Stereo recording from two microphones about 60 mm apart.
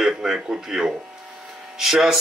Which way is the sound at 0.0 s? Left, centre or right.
Centre.